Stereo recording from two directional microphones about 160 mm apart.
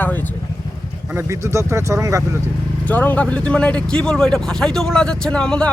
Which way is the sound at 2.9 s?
10° left (ahead or behind).